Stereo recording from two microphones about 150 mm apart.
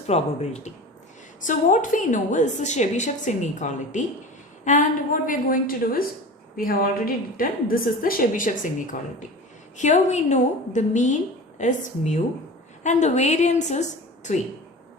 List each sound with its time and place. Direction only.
0.1 s a woman's voice: 45° left (ahead or behind)
1.4 s a woman's voice: 60° left (ahead or behind)